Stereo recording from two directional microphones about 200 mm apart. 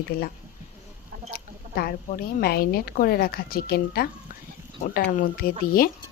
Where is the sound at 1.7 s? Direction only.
50° left (ahead or behind).